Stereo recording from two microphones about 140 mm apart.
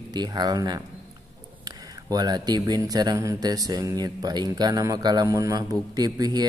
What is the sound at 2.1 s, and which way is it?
Speech, 30° right (ahead or behind).